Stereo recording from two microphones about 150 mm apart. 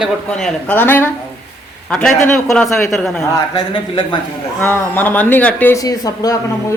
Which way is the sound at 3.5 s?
30° left (ahead or behind).